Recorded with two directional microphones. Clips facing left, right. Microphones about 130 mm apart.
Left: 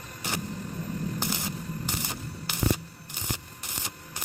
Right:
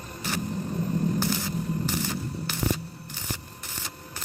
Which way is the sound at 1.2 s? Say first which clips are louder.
Right 5 dB; 20° left (ahead or behind).